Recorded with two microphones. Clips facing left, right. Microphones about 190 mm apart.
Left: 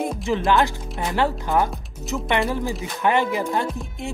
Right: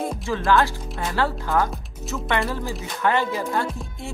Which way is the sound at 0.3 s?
20° left (ahead or behind).